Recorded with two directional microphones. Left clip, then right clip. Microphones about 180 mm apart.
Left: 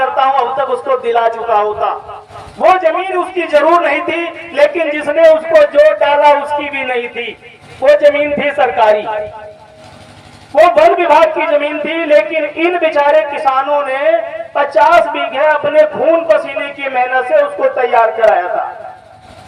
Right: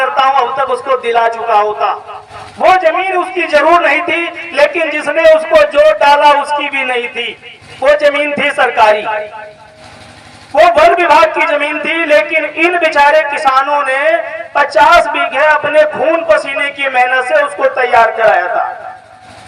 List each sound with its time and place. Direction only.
0.0 s a man's voice: 15° right (ahead or behind)
10.5 s a man's voice: 20° right (ahead or behind)